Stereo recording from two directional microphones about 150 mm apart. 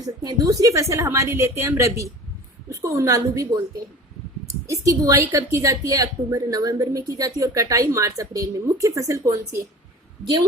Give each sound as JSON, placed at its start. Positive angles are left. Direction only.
{"t": 0.0, "sound": "a woman's voice", "side_deg": -25}
{"t": 4.6, "sound": "a woman's voice", "side_deg": -20}